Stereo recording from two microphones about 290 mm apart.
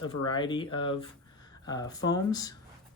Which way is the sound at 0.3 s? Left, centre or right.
Centre.